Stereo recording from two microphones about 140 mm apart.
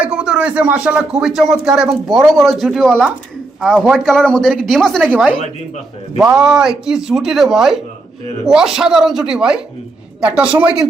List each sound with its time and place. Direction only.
0.0 s speech: 5° right (ahead or behind)
6.3 s a woman's voice: 5° right (ahead or behind)